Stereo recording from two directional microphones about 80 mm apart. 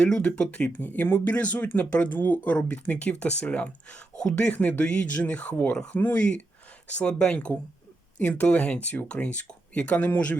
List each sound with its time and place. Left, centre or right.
0.0 s speech: centre